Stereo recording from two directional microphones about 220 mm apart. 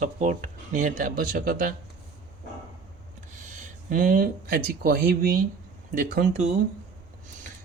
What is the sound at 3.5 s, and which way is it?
Speech, 35° right (ahead or behind).